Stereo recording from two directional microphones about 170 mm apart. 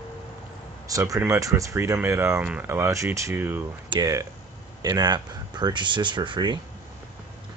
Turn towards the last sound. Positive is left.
turn(degrees=-25)  # may be behind; listen again after turning